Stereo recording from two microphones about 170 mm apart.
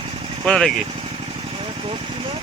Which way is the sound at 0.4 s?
5° left (ahead or behind).